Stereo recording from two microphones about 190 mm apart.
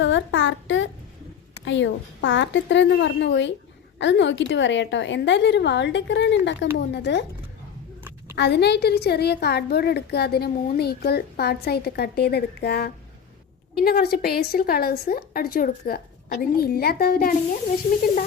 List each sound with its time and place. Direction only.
0.0 s a sound: 75° left (ahead or behind)
1.6 s a woman's voice: 75° left (ahead or behind)
8.4 s a woman's voice: 60° left (ahead or behind)